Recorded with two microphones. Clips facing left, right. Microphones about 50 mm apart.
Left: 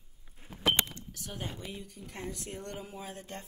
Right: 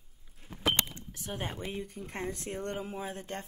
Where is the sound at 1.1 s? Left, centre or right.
Right.